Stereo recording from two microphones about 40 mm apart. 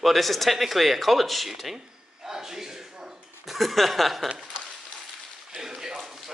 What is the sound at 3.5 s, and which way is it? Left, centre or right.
Speech, centre.